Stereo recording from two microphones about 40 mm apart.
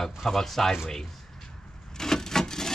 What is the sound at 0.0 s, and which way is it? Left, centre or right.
Speech, centre.